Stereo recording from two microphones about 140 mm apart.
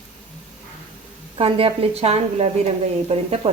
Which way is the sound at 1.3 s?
40° right (ahead or behind).